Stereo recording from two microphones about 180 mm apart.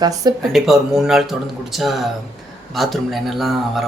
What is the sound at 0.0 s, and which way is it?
Speech, 20° right (ahead or behind).